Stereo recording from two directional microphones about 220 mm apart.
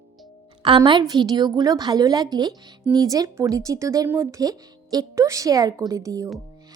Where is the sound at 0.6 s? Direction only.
20° right (ahead or behind).